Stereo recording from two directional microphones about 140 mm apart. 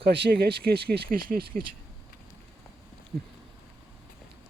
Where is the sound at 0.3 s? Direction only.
90° right.